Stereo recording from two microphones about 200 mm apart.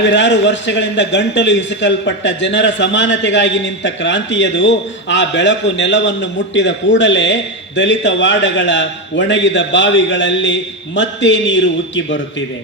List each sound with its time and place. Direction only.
0.0 s a man's voice: 65° left (ahead or behind)